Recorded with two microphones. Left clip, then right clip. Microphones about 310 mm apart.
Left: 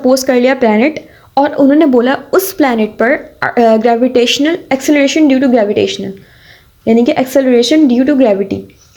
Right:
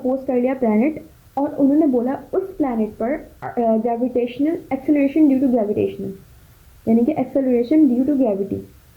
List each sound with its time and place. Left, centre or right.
0.3 s a woman's voice: left
1.4 s a woman's voice: left